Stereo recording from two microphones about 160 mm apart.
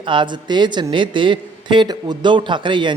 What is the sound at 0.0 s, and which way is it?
Speech, 30° right (ahead or behind).